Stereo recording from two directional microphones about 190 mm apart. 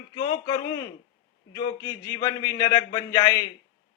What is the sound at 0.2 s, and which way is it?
A man's voice, 20° left (ahead or behind).